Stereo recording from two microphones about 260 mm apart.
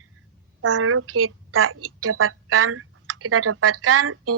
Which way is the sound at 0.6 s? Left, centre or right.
Right.